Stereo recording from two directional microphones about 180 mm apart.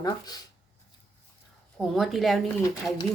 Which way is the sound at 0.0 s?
20° left (ahead or behind).